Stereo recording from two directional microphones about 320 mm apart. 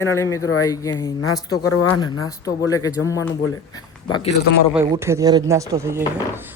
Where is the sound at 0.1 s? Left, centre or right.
Centre.